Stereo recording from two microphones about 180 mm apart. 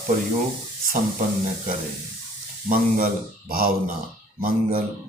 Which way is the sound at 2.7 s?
50° right (ahead or behind).